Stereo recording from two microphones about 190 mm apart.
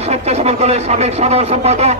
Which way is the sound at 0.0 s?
35° right (ahead or behind).